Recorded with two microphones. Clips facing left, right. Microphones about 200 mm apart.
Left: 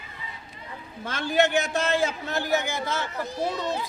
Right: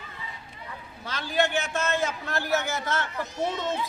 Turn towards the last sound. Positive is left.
turn(degrees=35)  # may be behind; listen again after turning